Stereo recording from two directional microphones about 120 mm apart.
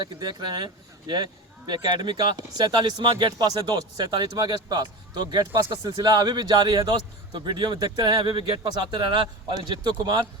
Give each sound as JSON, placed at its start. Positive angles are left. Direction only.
{"t": 0.0, "sound": "speech", "side_deg": -35}